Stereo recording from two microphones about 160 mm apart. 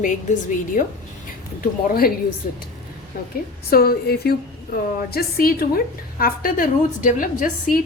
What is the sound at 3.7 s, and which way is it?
A woman's voice, 75° left (ahead or behind).